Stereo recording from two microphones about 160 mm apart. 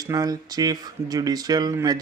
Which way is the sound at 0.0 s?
25° right (ahead or behind).